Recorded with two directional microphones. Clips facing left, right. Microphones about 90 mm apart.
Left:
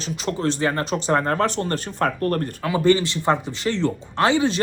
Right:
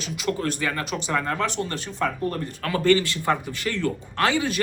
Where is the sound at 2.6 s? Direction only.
15° left (ahead or behind).